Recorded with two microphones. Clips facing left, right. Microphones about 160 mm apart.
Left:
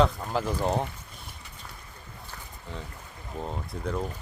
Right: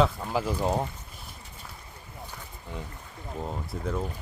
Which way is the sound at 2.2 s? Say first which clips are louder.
Right 1 dB; 10° right (ahead or behind).